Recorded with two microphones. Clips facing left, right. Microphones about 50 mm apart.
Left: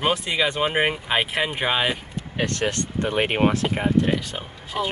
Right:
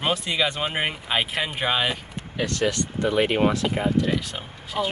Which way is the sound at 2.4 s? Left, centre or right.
Left.